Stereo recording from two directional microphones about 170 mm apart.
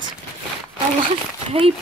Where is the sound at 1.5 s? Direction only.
35° right (ahead or behind).